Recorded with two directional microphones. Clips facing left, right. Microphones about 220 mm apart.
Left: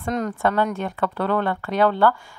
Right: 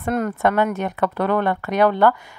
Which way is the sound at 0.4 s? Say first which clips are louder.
Right 2 dB; 20° right (ahead or behind).